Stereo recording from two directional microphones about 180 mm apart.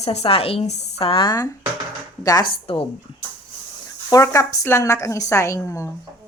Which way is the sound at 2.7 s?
30° left (ahead or behind).